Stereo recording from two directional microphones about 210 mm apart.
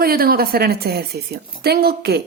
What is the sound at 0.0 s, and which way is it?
A woman's voice, 45° right (ahead or behind).